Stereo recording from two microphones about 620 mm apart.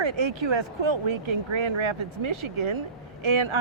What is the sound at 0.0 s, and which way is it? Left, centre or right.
Speech, right.